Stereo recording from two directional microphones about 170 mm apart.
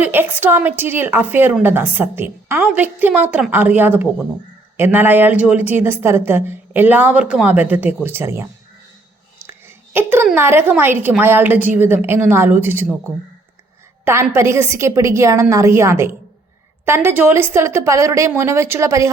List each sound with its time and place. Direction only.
0.0 s a woman's voice: 10° right (ahead or behind)
9.5 s a sound: 15° right (ahead or behind)
10.3 s a woman's voice: 15° right (ahead or behind)
14.0 s a woman's voice: 15° right (ahead or behind)